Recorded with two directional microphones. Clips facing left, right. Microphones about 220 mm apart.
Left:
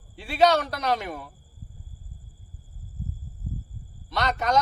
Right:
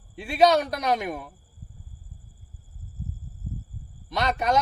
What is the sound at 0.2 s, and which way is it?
A man's voice, 15° right (ahead or behind).